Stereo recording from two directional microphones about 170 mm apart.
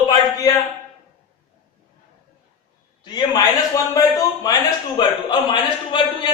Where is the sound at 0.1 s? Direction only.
20° left (ahead or behind).